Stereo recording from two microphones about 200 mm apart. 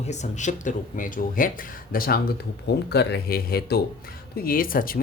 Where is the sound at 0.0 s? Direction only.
35° left (ahead or behind).